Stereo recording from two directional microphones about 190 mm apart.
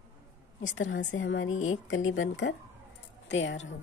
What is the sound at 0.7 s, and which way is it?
A woman's voice, 85° left.